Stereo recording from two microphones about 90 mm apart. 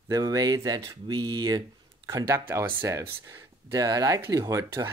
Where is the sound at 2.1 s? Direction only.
35° right (ahead or behind).